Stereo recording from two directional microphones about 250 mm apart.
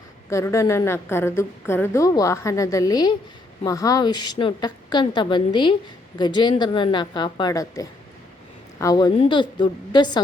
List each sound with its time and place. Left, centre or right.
0.3 s a woman's voice: centre